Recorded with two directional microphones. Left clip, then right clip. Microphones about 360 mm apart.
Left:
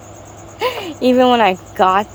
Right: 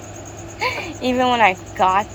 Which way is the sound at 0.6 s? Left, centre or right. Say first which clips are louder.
Left 4 dB; left.